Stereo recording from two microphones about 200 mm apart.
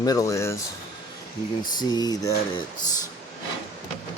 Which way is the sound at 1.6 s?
20° left (ahead or behind).